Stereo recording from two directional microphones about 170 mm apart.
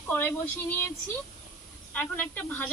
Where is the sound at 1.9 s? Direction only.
10° left (ahead or behind).